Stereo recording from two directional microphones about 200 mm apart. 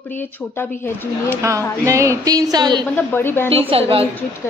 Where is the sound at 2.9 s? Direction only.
10° left (ahead or behind).